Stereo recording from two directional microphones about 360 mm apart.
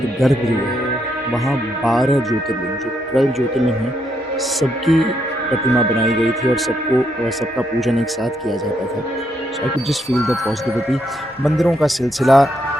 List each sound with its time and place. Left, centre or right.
0.2 s speech: centre
7.8 s speech: centre
10.1 s speech: centre